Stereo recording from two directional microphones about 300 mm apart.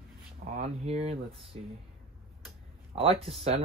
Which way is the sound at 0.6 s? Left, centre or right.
Right.